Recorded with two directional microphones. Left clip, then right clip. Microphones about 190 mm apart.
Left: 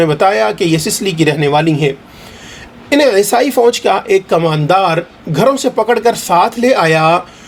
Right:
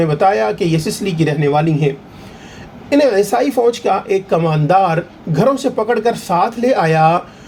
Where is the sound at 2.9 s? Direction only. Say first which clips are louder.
Left 3 dB; 45° left (ahead or behind).